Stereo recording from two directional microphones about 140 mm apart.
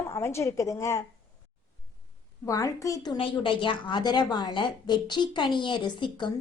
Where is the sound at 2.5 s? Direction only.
25° left (ahead or behind).